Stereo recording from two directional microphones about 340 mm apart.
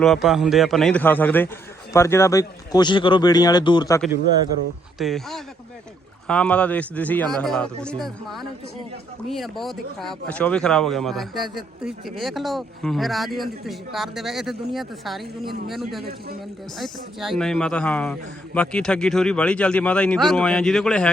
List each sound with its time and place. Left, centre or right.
0.0 s speech: centre
4.9 s speech: centre
16.0 s a man's voice: right
16.7 s speech: centre